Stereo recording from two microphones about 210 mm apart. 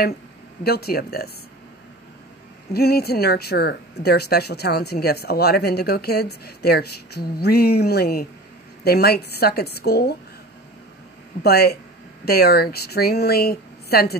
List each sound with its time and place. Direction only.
0.7 s speech: 45° left (ahead or behind)
2.7 s speech: 50° left (ahead or behind)
11.4 s speech: 50° left (ahead or behind)